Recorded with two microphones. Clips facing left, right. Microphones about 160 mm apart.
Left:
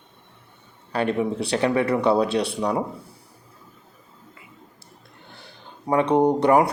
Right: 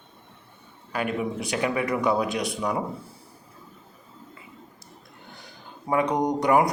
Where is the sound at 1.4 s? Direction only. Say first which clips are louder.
Left 4 dB; 30° left (ahead or behind).